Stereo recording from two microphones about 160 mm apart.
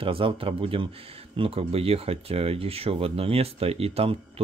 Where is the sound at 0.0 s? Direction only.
35° right (ahead or behind).